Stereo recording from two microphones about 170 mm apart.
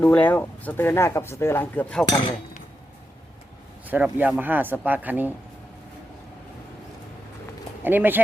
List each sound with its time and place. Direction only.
0.0 s speech: 10° left (ahead or behind)
3.8 s speech: 10° right (ahead or behind)
7.9 s speech: 10° right (ahead or behind)